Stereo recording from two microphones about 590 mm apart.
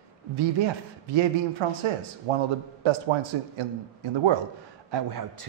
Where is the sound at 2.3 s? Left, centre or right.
Right.